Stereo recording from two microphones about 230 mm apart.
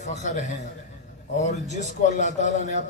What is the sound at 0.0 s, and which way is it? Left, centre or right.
Speech, left.